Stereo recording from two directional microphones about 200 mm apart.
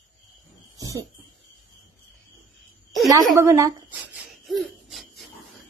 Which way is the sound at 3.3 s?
15° right (ahead or behind).